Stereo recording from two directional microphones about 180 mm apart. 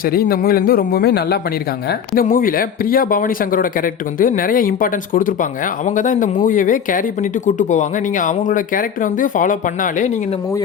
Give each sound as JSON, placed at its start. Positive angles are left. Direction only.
{"t": 0.0, "sound": "a man's voice", "side_deg": 55}